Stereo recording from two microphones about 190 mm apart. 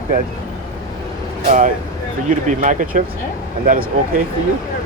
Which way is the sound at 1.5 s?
40° right (ahead or behind).